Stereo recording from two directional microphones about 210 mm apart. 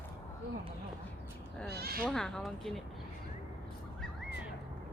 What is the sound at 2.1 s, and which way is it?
Speech, 5° left (ahead or behind).